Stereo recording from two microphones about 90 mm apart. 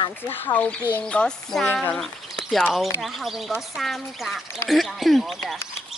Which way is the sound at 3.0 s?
Centre (ahead or behind).